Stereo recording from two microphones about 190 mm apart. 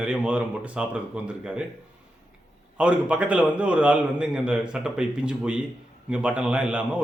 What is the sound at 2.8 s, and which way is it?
A man's voice, 5° right (ahead or behind).